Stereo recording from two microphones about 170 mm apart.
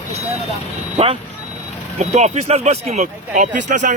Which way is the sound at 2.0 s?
40° right (ahead or behind).